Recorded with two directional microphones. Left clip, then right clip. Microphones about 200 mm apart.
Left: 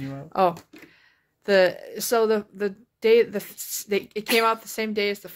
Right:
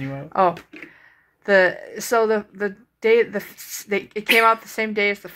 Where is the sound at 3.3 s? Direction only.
25° left (ahead or behind).